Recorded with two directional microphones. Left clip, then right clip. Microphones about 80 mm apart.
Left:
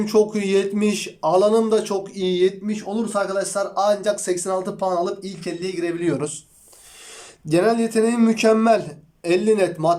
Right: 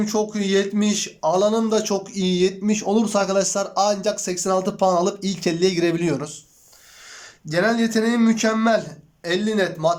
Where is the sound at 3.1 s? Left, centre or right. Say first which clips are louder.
Left 2 dB; right.